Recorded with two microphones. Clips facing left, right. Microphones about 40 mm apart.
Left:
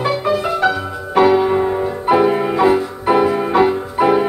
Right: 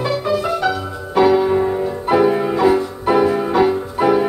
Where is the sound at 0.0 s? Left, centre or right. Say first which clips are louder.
Left 1 dB; left.